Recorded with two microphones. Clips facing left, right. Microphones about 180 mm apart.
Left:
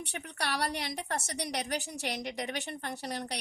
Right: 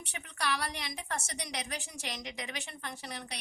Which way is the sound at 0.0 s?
65° left (ahead or behind).